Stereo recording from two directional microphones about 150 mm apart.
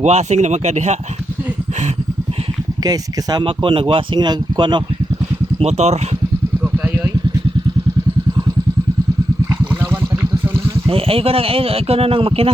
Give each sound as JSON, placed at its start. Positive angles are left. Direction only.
{"t": 0.0, "sound": "speech", "side_deg": -50}
{"t": 2.8, "sound": "speech", "side_deg": -25}
{"t": 5.5, "sound": "speech", "side_deg": -45}
{"t": 6.6, "sound": "a sound", "side_deg": -10}
{"t": 9.5, "sound": "a sound", "side_deg": -15}
{"t": 10.8, "sound": "speech", "side_deg": -40}